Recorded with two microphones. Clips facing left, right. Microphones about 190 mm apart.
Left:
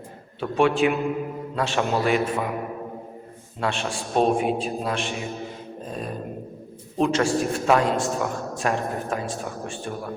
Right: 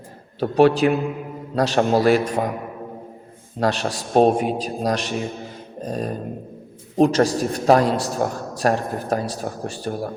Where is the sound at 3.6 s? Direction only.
40° right (ahead or behind).